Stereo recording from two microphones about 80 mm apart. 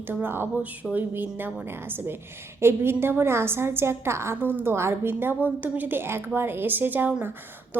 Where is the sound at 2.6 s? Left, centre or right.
Right.